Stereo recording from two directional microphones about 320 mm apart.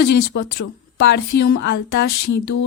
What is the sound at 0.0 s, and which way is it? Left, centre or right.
Speech, left.